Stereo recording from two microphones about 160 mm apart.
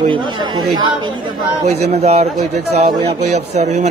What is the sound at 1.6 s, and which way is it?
Speech, 40° right (ahead or behind).